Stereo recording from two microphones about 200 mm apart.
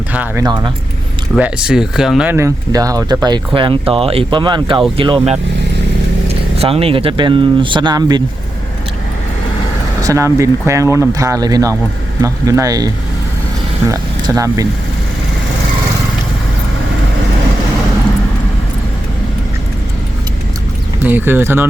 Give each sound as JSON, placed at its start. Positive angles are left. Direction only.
{"t": 0.1, "sound": "speech", "side_deg": -5}
{"t": 6.6, "sound": "speech", "side_deg": -30}
{"t": 10.0, "sound": "speech", "side_deg": -15}
{"t": 13.9, "sound": "speech", "side_deg": -15}
{"t": 21.0, "sound": "speech", "side_deg": -10}